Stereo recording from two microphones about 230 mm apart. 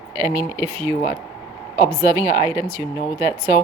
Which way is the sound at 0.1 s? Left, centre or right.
Centre.